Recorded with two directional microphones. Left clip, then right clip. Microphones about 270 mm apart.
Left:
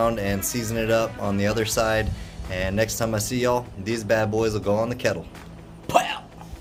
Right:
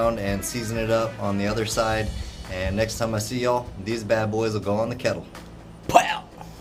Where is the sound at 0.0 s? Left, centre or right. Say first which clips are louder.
Left 1 dB; left.